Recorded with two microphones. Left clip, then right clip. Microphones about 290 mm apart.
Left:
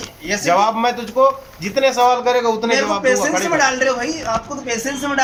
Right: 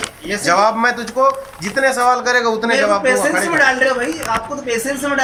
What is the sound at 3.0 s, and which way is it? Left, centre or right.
Speech, centre.